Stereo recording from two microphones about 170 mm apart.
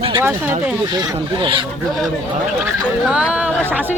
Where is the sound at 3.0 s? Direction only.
5° right (ahead or behind).